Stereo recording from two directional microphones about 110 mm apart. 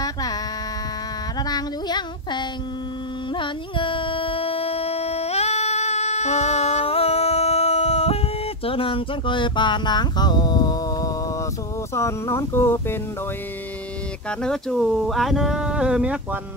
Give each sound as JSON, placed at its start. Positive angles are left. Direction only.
{"t": 0.0, "sound": "hum", "side_deg": 35}
{"t": 1.5, "sound": "music", "side_deg": 40}
{"t": 8.6, "sound": "a sound", "side_deg": 55}
{"t": 11.9, "sound": "speech", "side_deg": 25}
{"t": 14.4, "sound": "speech", "side_deg": 5}